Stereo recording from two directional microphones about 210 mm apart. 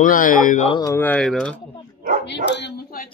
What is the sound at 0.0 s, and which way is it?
Speech, 40° left (ahead or behind).